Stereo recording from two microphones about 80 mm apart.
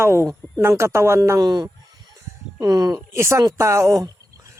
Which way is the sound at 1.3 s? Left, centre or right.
Right.